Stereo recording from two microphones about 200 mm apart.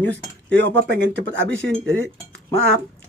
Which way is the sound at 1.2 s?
70° right (ahead or behind).